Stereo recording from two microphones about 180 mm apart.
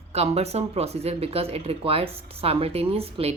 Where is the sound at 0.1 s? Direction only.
35° right (ahead or behind).